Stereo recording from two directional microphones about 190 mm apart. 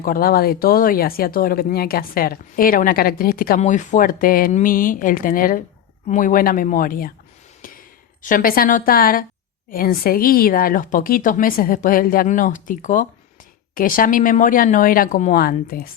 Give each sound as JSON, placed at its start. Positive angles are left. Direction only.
{"t": 0.0, "sound": "speech", "side_deg": 50}
{"t": 8.2, "sound": "speech", "side_deg": 45}